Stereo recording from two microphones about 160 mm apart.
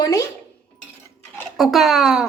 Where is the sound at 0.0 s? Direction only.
20° left (ahead or behind).